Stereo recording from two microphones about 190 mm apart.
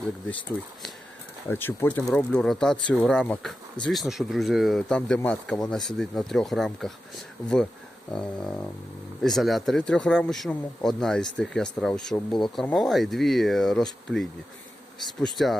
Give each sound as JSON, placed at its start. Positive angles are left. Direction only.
{"t": 1.5, "sound": "speech", "side_deg": 10}
{"t": 15.3, "sound": "speech", "side_deg": 0}